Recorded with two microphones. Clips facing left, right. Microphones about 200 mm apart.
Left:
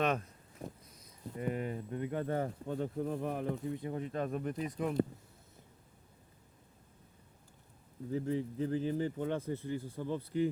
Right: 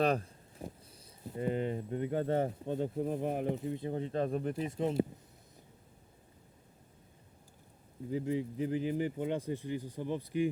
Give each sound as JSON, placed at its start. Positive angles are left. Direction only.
{"t": 0.0, "sound": "speech", "side_deg": -35}
{"t": 8.1, "sound": "speech", "side_deg": -15}